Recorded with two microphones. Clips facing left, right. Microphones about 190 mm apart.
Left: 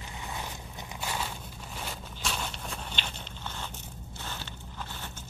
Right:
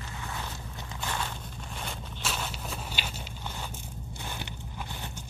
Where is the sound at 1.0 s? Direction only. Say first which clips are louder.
Even; 10° left (ahead or behind); by 5.1 s 15° right (ahead or behind).